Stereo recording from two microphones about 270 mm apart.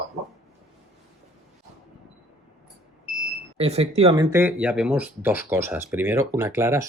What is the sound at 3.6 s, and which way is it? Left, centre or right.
Speech, right.